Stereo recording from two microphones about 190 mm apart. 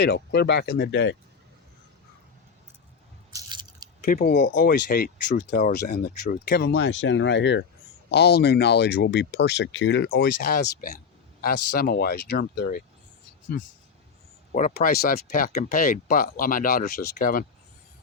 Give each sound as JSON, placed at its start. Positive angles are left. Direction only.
{"t": 0.0, "sound": "speech", "side_deg": 60}
{"t": 3.3, "sound": "biting", "side_deg": -20}
{"t": 4.0, "sound": "speech", "side_deg": 50}
{"t": 14.5, "sound": "speech", "side_deg": 45}